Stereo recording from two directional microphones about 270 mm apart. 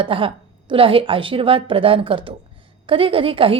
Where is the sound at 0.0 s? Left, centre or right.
Centre.